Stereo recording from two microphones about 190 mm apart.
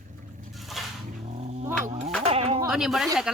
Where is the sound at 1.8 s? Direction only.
40° right (ahead or behind).